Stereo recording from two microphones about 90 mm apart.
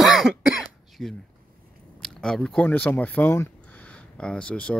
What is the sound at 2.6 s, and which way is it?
Speech, 20° left (ahead or behind).